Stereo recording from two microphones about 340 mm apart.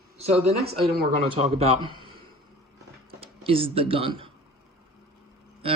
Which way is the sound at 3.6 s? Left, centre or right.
Centre.